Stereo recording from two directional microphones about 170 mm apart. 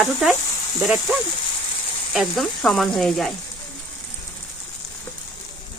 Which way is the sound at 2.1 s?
Centre (ahead or behind).